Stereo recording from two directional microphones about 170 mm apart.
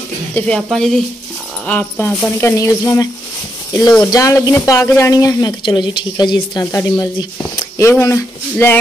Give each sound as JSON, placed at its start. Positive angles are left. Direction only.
{"t": 0.3, "sound": "speech", "side_deg": 5}
{"t": 4.1, "sound": "speech", "side_deg": 20}